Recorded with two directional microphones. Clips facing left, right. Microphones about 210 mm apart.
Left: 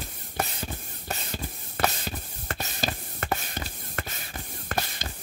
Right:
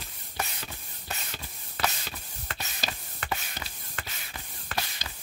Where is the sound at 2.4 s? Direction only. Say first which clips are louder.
Left 5 dB; 45° left (ahead or behind).